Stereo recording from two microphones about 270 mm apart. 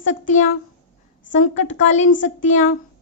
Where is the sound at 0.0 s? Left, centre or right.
Left.